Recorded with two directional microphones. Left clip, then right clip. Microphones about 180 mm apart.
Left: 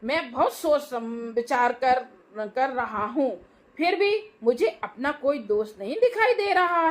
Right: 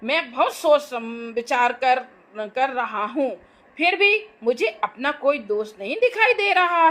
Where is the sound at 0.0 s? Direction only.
30° right (ahead or behind).